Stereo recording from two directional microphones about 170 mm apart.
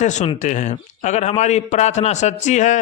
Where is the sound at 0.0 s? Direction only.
45° left (ahead or behind).